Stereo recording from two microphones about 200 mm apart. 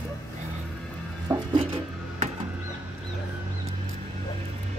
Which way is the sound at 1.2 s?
25° right (ahead or behind).